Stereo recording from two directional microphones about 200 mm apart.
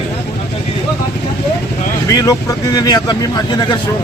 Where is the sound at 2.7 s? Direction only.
20° left (ahead or behind).